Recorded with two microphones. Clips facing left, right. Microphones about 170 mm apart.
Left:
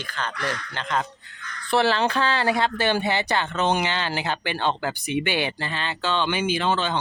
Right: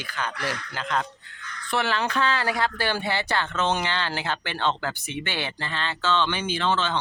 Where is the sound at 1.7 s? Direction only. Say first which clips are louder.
Left 5 dB; 30° left (ahead or behind).